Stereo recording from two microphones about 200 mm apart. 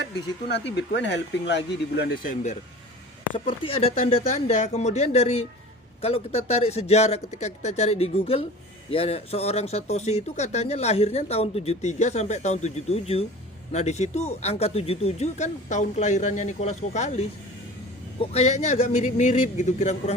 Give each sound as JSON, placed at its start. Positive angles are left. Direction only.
{"t": 1.1, "sound": "speech", "side_deg": 60}
{"t": 3.3, "sound": "speech", "side_deg": 25}